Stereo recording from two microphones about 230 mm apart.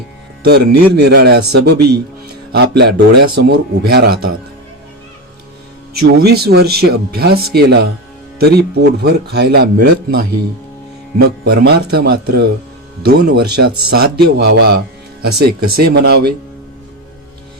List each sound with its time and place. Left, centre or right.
0.4 s speech: right
5.9 s speech: right